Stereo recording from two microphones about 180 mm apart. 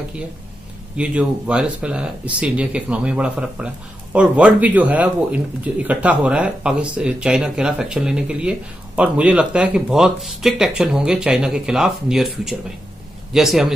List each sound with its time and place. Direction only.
0.9 s speech: 5° right (ahead or behind)